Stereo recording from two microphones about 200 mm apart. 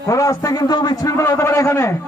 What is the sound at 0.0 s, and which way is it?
A man's voice, 15° left (ahead or behind).